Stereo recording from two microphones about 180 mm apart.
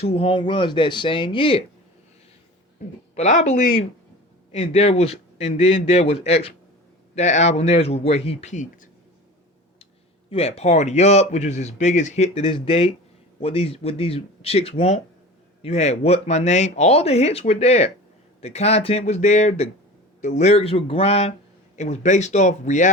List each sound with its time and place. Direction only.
0.0 s speech: 35° left (ahead or behind)
3.2 s speech: 40° left (ahead or behind)
10.2 s speech: 35° left (ahead or behind)